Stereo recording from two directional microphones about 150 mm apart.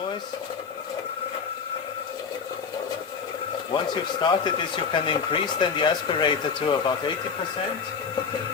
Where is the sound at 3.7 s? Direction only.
30° left (ahead or behind).